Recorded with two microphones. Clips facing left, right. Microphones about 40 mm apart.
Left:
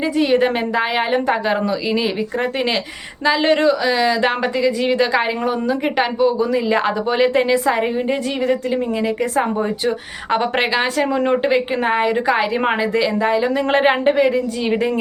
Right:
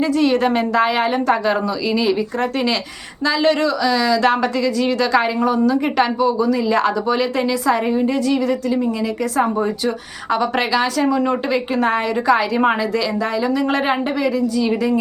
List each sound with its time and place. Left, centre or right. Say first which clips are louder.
0.0 s a woman's voice: even; centre
3.2 s a woman's voice: left 2 dB; left
9.8 s a woman's voice: left 1 dB; left